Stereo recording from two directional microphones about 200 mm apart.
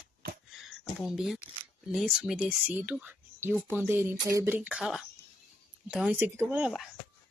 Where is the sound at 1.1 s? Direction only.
Centre (ahead or behind).